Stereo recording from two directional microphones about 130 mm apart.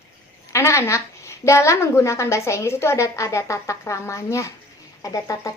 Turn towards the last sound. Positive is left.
turn(degrees=25)  # may be behind; listen again after turning